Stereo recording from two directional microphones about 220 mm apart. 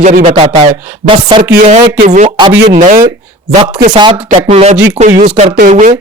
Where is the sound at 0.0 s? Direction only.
35° right (ahead or behind).